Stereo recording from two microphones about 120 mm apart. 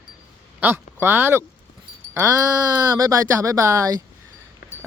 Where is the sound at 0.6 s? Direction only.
20° right (ahead or behind).